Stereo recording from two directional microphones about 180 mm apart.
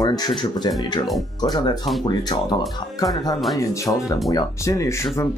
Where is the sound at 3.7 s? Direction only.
20° left (ahead or behind).